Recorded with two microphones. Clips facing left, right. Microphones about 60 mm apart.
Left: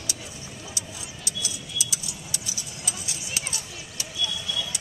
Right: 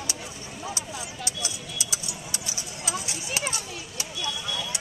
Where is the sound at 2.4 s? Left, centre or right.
Right.